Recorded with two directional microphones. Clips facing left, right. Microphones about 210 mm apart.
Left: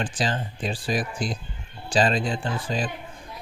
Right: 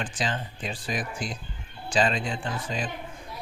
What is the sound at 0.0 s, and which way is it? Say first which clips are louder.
Speech: left 4 dB; 35° left (ahead or behind).